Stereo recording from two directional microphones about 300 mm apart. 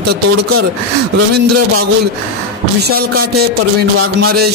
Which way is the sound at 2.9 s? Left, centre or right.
Right.